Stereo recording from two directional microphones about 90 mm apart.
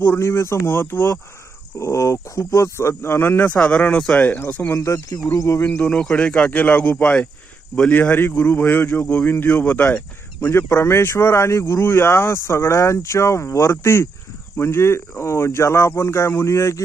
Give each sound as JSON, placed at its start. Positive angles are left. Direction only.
{"t": 0.0, "sound": "speech", "side_deg": 25}
{"t": 3.5, "sound": "speech", "side_deg": 10}
{"t": 4.7, "sound": "speech", "side_deg": 40}
{"t": 5.6, "sound": "speech", "side_deg": 15}
{"t": 7.9, "sound": "speech", "side_deg": 25}